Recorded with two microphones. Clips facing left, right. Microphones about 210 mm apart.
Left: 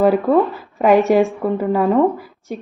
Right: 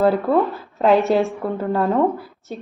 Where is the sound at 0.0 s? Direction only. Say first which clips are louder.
Left 3 dB; 10° left (ahead or behind).